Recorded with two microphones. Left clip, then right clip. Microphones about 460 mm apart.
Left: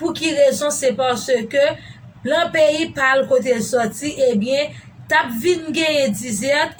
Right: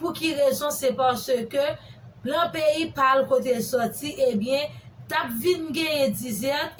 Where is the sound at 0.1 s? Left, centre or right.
Right.